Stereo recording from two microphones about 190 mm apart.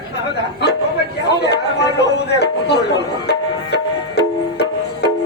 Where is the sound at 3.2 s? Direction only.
60° left (ahead or behind).